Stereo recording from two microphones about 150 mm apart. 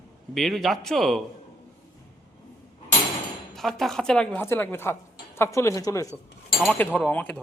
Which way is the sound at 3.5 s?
Centre (ahead or behind).